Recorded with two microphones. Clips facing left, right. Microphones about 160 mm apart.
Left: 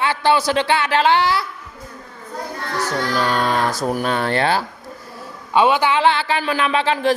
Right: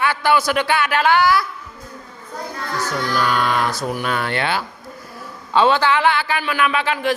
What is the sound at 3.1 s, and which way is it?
A woman's voice, 35° left (ahead or behind).